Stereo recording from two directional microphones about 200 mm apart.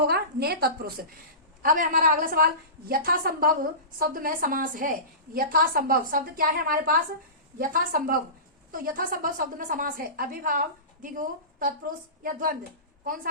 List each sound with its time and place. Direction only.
0.0 s a woman's voice: 50° right (ahead or behind)
1.6 s a woman's voice: 40° right (ahead or behind)